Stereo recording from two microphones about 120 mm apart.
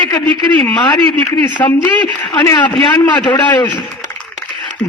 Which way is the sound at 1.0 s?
45° right (ahead or behind).